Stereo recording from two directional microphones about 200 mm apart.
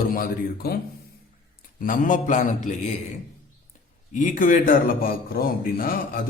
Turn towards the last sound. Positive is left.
turn(degrees=45)  # may be behind; listen again after turning